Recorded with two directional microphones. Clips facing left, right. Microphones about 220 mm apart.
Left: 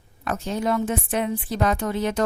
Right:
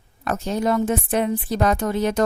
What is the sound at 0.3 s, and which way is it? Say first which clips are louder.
A woman's voice: right 3 dB; 40° right (ahead or behind).